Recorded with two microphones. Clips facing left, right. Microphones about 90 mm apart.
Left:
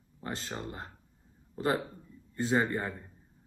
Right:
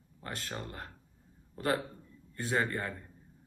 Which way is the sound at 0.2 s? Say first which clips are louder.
Left 3 dB; 20° left (ahead or behind).